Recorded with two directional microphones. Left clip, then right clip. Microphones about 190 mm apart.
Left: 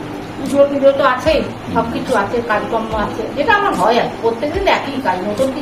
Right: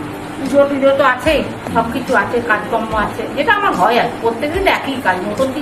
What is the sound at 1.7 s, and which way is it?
Speech, centre (ahead or behind).